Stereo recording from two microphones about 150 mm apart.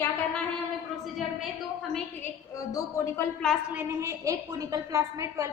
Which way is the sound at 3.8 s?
20° right (ahead or behind).